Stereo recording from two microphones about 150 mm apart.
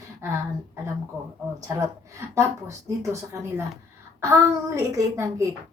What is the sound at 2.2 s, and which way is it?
Speech, 20° right (ahead or behind).